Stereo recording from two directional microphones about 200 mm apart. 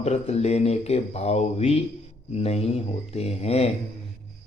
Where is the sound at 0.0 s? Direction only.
30° left (ahead or behind).